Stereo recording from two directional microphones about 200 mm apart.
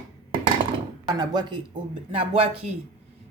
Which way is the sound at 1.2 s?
20° right (ahead or behind).